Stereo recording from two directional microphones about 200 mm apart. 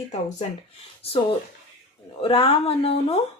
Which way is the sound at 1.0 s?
30° left (ahead or behind).